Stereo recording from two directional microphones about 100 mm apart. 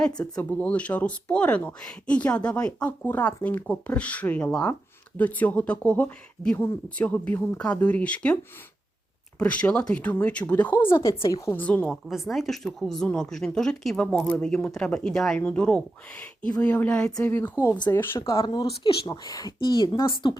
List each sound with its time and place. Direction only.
0.3 s speech: 10° left (ahead or behind)
9.4 s speech: 10° left (ahead or behind)
10.8 s speech: 30° left (ahead or behind)
11.5 s speech: 15° left (ahead or behind)
17.2 s speech: 25° left (ahead or behind)
18.3 s speech: 35° left (ahead or behind)
18.5 s speech: 55° left (ahead or behind)
19.0 s speech: 45° left (ahead or behind)
19.6 s speech: 50° left (ahead or behind)